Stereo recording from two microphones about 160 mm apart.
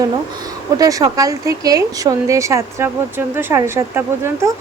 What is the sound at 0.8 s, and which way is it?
A woman's voice, 20° right (ahead or behind).